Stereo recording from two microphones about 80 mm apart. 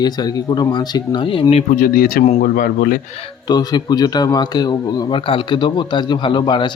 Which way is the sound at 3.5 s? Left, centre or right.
Left.